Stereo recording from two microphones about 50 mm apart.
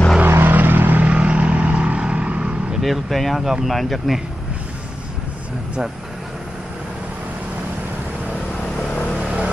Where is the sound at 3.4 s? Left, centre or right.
Centre.